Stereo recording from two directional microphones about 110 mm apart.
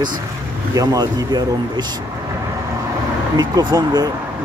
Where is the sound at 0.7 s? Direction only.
35° right (ahead or behind).